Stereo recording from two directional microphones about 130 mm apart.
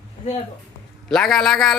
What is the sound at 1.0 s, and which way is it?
Speech, 5° left (ahead or behind).